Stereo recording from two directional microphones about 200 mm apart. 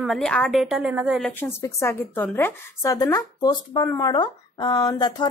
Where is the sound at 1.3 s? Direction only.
10° left (ahead or behind).